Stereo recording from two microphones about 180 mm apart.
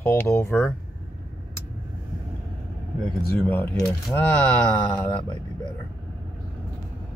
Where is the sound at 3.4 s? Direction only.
10° left (ahead or behind).